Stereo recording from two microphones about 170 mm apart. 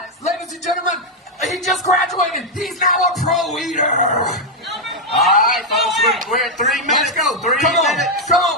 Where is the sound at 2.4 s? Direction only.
Centre (ahead or behind).